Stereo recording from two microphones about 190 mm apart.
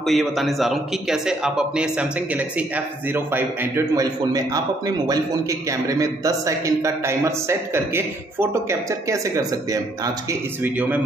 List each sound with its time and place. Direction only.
0.0 s a man's voice: centre (ahead or behind)